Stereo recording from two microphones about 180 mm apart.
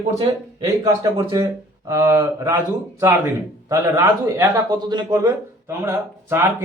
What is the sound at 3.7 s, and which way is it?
A man's voice, 15° right (ahead or behind).